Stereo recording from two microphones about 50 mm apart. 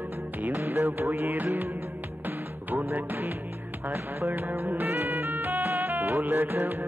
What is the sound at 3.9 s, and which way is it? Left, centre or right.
Music, right.